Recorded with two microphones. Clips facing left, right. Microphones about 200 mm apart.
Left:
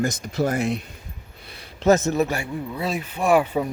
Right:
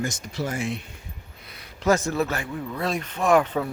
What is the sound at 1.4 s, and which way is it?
Speech, 25° left (ahead or behind).